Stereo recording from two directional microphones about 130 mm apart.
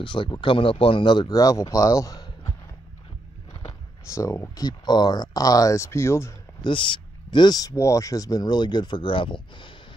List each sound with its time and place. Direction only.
0.0 s speech: 40° left (ahead or behind)
4.1 s speech: 20° left (ahead or behind)
6.6 s speech: 40° left (ahead or behind)